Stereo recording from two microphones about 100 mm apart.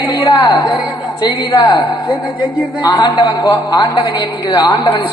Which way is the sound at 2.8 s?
45° left (ahead or behind).